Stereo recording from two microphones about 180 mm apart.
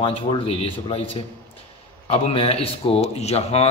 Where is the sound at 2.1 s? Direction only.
30° left (ahead or behind).